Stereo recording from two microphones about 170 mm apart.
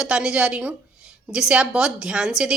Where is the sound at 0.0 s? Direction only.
5° right (ahead or behind).